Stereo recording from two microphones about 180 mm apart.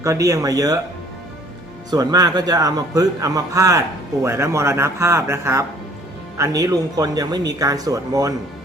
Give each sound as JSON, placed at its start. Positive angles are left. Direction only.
{"t": 0.0, "sound": "a man's voice", "side_deg": -15}
{"t": 1.9, "sound": "a man's voice", "side_deg": -20}